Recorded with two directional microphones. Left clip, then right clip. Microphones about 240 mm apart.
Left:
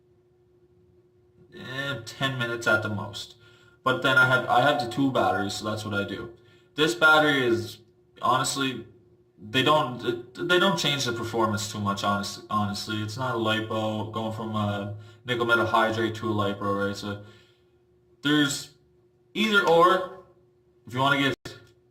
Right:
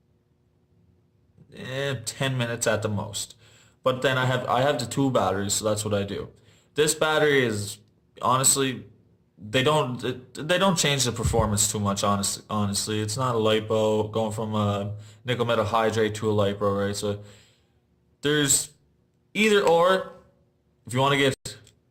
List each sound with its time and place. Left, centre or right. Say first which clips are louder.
1.5 s a man's voice: right 2 dB; right
6.7 s a man's voice: left 3 dB; right
18.2 s a man's voice: right 1 dB; right
20.9 s a man's voice: right 1 dB; right